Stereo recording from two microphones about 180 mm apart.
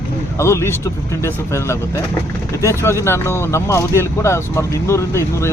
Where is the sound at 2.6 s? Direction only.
15° left (ahead or behind).